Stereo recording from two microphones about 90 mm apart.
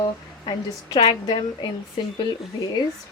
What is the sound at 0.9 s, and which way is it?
Speech, 65° left (ahead or behind).